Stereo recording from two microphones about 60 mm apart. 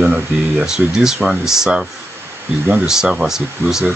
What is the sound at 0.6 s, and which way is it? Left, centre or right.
Speech, centre.